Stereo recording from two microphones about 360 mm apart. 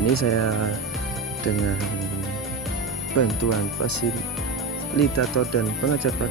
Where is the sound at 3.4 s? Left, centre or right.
Left.